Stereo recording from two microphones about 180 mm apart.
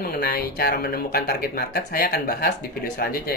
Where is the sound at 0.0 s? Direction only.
55° left (ahead or behind).